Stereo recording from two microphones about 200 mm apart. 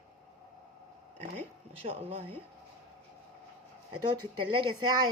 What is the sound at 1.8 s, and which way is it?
Speech, 30° right (ahead or behind).